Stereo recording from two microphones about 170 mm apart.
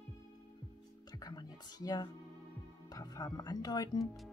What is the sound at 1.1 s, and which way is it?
Music, 25° left (ahead or behind).